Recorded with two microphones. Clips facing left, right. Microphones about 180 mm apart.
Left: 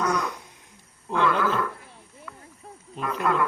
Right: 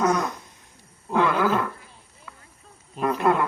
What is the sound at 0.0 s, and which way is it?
Fart, 45° right (ahead or behind).